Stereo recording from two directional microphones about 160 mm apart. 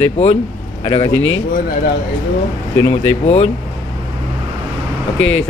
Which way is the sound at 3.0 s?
40° left (ahead or behind).